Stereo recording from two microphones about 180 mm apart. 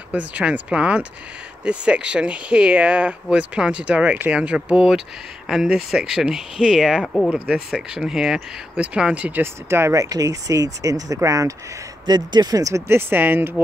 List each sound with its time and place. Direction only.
0.1 s speech: 10° right (ahead or behind)